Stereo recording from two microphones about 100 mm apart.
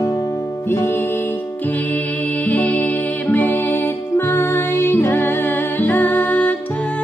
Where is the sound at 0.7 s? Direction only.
20° left (ahead or behind).